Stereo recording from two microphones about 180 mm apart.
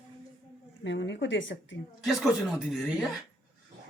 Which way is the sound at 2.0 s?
Centre (ahead or behind).